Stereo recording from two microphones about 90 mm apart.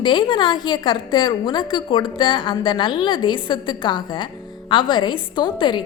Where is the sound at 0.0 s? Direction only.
60° left (ahead or behind).